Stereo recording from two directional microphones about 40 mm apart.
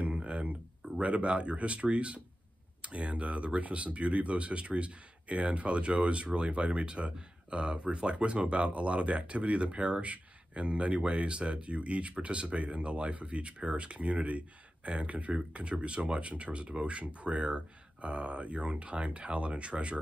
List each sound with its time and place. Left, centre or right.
0.0 s music: right
1.0 s speech: right